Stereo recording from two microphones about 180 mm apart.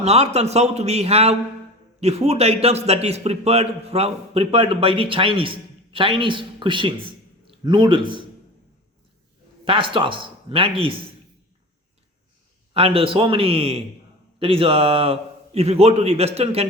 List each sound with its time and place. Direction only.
0.0 s a man's voice: 35° right (ahead or behind)
9.6 s speech: 30° right (ahead or behind)
12.7 s a man's voice: 30° right (ahead or behind)